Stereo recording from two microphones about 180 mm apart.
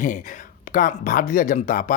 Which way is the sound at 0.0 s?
45° left (ahead or behind).